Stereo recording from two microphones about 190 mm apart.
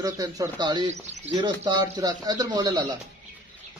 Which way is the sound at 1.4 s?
25° right (ahead or behind).